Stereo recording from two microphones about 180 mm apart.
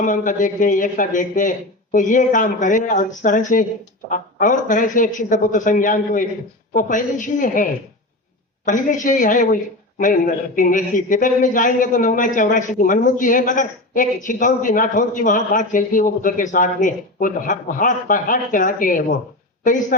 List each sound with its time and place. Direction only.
0.0 s a man's voice: 45° left (ahead or behind)